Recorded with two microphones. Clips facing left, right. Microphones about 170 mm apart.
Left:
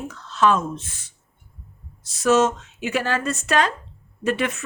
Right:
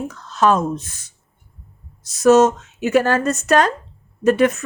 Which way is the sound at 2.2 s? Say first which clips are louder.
Right 6 dB; 40° right (ahead or behind).